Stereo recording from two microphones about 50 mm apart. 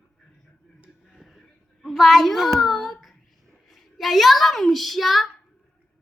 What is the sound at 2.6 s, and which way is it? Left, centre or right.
Child singing, centre.